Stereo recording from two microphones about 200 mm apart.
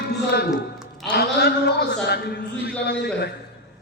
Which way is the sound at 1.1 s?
50° left (ahead or behind).